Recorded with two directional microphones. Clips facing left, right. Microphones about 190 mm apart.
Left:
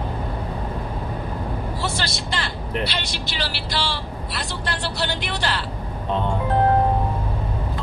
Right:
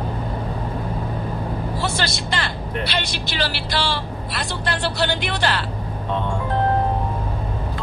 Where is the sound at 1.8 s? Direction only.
55° right (ahead or behind).